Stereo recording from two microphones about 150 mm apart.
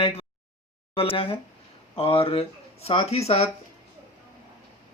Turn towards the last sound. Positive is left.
turn(degrees=45)  # may be behind; listen again after turning